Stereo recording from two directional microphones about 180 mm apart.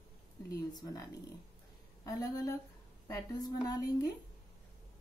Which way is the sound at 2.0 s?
20° left (ahead or behind).